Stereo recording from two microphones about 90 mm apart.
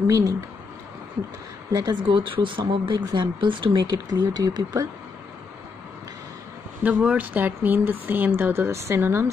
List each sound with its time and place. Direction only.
0.0 s speech: 40° right (ahead or behind)
1.7 s speech: 50° right (ahead or behind)
6.8 s speech: 15° right (ahead or behind)